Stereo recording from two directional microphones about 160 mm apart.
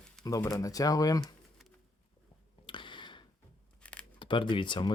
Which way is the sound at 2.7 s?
30° left (ahead or behind).